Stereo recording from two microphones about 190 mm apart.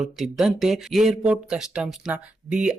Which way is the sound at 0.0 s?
Centre (ahead or behind).